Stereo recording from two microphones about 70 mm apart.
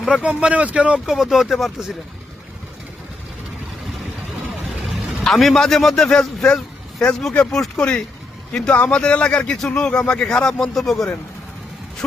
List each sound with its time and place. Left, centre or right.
0.2 s speech: centre
1.0 s speech: centre
4.9 s a man's voice: centre